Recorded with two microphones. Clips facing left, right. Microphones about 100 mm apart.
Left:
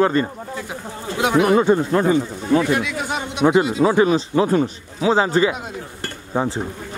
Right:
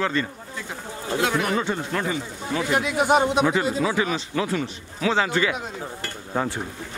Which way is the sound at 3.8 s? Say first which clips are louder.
Left 8 dB; 35° left (ahead or behind).